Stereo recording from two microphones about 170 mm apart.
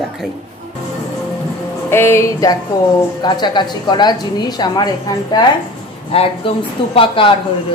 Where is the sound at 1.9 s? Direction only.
15° left (ahead or behind); by 7.3 s 30° left (ahead or behind).